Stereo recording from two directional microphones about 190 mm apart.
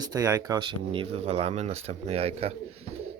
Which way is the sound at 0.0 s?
20° right (ahead or behind).